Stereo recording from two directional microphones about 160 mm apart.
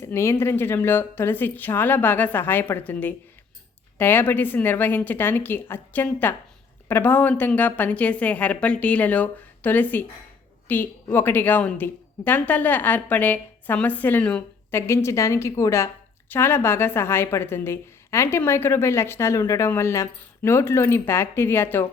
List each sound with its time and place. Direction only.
0.0 s a woman's voice: 15° left (ahead or behind)